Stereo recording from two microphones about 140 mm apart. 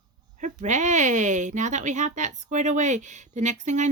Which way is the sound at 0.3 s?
60° right (ahead or behind).